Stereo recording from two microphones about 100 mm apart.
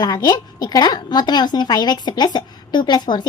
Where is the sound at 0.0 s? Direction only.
45° left (ahead or behind).